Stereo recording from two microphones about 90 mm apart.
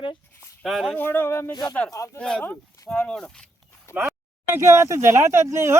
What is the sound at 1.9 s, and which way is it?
Speech, 35° left (ahead or behind).